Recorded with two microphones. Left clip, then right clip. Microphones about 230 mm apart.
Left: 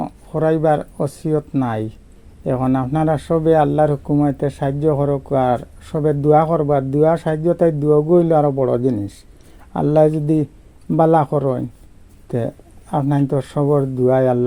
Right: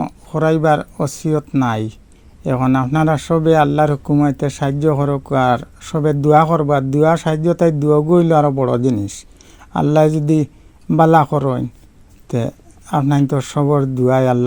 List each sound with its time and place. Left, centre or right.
0.0 s speech: right